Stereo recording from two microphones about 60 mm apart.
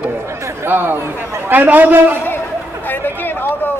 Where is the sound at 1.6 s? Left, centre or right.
Right.